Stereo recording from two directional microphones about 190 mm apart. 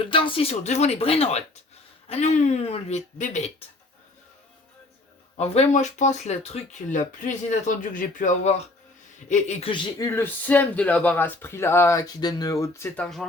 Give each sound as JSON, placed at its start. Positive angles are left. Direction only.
{"t": 0.0, "sound": "speech", "side_deg": 25}
{"t": 5.4, "sound": "speech", "side_deg": 35}
{"t": 10.2, "sound": "speech", "side_deg": 10}